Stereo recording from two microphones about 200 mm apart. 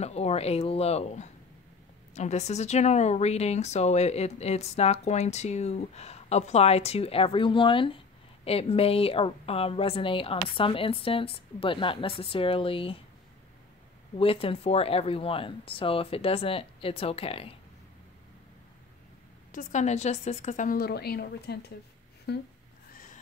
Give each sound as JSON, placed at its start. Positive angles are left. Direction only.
{"t": 0.0, "sound": "a woman's voice", "side_deg": 30}
{"t": 14.1, "sound": "a woman's voice", "side_deg": 30}
{"t": 19.5, "sound": "a woman's voice", "side_deg": 40}